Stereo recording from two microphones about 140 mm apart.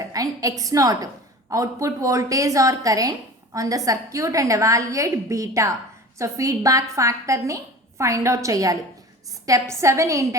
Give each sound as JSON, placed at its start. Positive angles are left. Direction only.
{"t": 0.1, "sound": "a woman's voice", "side_deg": -25}